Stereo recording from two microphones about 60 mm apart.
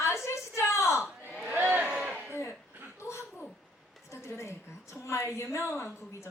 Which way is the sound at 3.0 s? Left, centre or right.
Left.